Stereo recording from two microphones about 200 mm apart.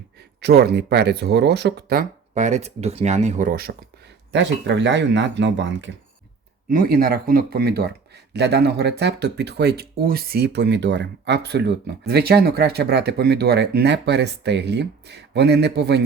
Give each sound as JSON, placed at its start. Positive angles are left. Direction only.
{"t": 0.3, "sound": "speech", "side_deg": -55}
{"t": 4.3, "sound": "speech", "side_deg": -60}
{"t": 6.7, "sound": "speech", "side_deg": -45}